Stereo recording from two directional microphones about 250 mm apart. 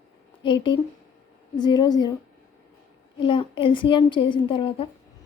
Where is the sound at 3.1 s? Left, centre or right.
Centre.